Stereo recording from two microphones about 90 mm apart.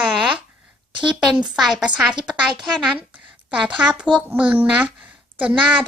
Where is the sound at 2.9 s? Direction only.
20° right (ahead or behind).